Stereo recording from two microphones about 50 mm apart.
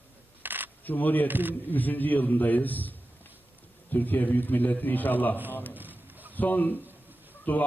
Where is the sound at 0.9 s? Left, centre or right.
Left.